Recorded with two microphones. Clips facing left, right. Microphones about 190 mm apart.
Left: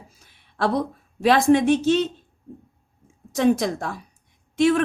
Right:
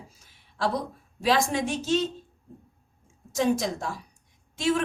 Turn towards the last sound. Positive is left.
turn(degrees=60)  # may be behind; listen again after turning